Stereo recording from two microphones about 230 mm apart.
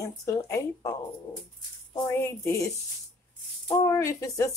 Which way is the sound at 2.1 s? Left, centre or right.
Centre.